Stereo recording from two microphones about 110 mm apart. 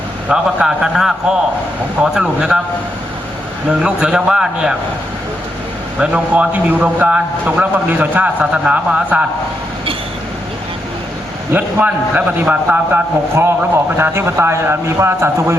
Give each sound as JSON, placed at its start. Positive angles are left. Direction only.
{"t": 0.3, "sound": "a man's voice", "side_deg": -5}
{"t": 2.1, "sound": "a man's voice", "side_deg": -10}
{"t": 3.7, "sound": "a man's voice", "side_deg": -10}
{"t": 6.0, "sound": "a man's voice", "side_deg": -10}
{"t": 11.5, "sound": "a man's voice", "side_deg": -15}